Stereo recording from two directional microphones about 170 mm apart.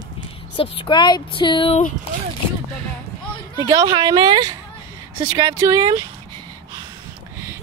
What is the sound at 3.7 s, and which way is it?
Speech, 25° right (ahead or behind).